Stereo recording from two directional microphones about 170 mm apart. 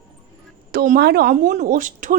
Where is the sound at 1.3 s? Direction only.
45° right (ahead or behind).